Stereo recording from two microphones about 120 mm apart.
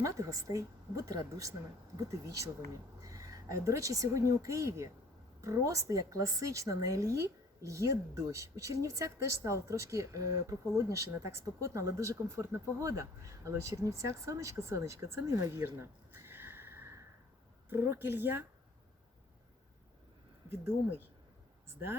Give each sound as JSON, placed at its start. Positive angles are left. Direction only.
{"t": 0.0, "sound": "a woman's voice", "side_deg": -25}
{"t": 20.5, "sound": "a woman's voice", "side_deg": -20}